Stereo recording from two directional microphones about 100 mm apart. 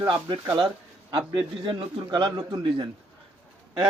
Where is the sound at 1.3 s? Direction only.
55° right (ahead or behind).